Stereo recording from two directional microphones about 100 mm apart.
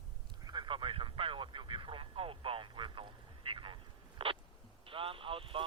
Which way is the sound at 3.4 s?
55° right (ahead or behind).